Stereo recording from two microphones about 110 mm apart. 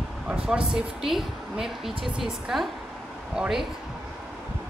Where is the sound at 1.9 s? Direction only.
55° right (ahead or behind).